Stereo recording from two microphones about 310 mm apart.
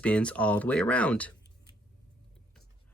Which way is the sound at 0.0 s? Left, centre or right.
Centre.